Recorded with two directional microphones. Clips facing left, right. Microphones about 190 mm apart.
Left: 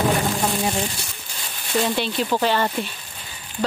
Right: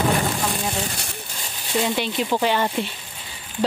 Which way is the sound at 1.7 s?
10° right (ahead or behind).